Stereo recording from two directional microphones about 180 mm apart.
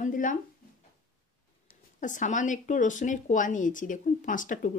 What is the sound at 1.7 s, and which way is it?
Speech, 45° left (ahead or behind).